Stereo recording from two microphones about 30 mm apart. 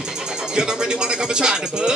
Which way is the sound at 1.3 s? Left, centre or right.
Right.